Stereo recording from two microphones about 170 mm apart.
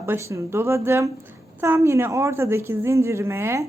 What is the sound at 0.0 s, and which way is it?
Speech, 15° right (ahead or behind).